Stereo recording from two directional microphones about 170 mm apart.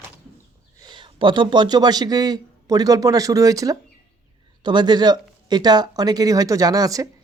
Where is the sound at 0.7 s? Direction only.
25° right (ahead or behind).